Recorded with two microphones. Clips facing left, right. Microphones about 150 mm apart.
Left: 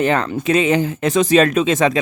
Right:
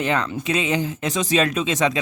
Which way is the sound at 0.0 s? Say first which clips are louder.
Left 5 dB; 55° left (ahead or behind).